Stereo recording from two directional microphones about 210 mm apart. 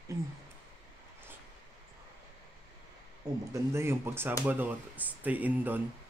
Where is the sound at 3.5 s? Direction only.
10° right (ahead or behind).